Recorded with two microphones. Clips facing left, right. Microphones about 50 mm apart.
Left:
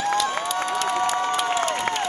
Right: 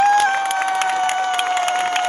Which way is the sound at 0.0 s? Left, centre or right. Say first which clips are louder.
Right 8 dB; right.